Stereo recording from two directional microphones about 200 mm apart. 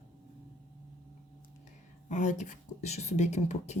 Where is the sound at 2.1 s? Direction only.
35° left (ahead or behind).